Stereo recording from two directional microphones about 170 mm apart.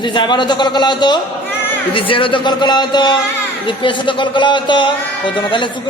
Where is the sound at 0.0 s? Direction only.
25° left (ahead or behind).